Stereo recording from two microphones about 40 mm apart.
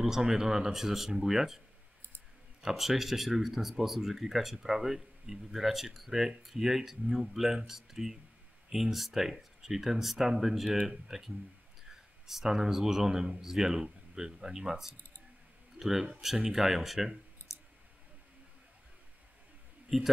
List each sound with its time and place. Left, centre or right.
0.1 s speech: centre
2.6 s speech: centre
17.4 s clicking: left
19.9 s speech: centre